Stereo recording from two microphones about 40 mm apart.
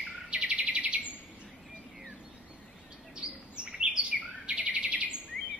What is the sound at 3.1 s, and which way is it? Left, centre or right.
Chirp, right.